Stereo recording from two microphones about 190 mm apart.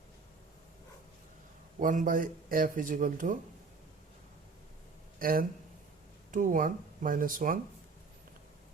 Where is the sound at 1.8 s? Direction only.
45° right (ahead or behind).